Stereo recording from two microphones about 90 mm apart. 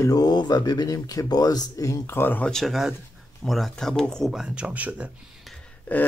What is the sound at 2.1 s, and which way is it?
Speech, 20° left (ahead or behind).